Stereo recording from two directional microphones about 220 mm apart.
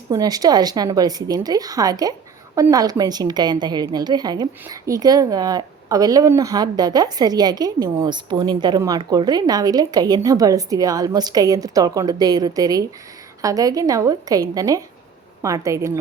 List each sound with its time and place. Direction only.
0.1 s a woman's voice: 15° right (ahead or behind)